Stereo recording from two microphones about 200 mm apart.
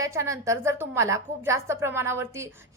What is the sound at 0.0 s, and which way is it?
A woman's voice, 15° right (ahead or behind).